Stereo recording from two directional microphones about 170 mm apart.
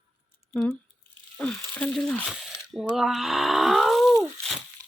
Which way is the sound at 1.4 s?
5° left (ahead or behind).